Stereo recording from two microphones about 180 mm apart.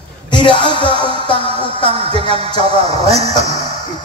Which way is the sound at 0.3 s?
25° left (ahead or behind).